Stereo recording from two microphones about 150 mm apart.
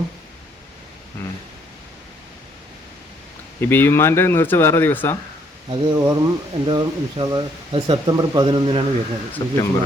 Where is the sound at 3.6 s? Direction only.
15° left (ahead or behind).